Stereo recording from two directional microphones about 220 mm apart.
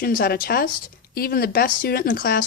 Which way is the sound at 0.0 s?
45° left (ahead or behind).